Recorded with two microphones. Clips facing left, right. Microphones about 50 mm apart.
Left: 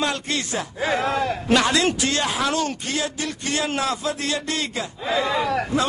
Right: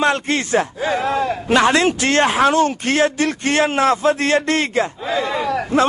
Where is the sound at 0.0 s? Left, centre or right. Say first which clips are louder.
Right 7 dB; right.